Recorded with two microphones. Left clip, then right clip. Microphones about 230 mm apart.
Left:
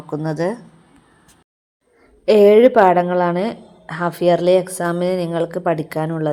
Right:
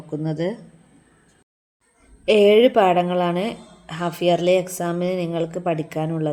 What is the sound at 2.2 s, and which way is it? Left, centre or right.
A woman's voice, centre.